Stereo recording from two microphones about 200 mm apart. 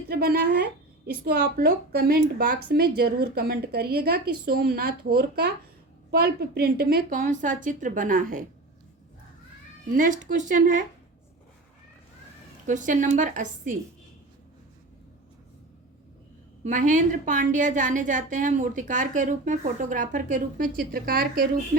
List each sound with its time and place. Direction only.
0.1 s a woman's voice: 50° right (ahead or behind)
9.9 s a woman's voice: 40° right (ahead or behind)
12.6 s a woman's voice: 40° right (ahead or behind)
16.6 s a woman's voice: 40° right (ahead or behind)